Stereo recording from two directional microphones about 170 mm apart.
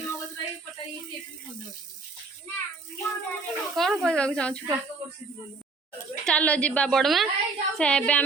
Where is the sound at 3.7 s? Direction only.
Centre (ahead or behind).